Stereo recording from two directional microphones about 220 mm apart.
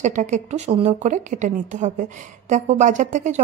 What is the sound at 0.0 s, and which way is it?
A woman's voice, 35° right (ahead or behind).